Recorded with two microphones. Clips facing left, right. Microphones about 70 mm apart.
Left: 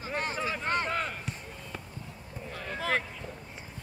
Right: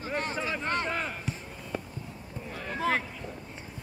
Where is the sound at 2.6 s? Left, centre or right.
Right.